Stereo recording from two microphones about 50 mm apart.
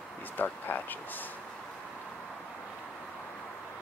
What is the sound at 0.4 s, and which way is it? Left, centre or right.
Speech, left.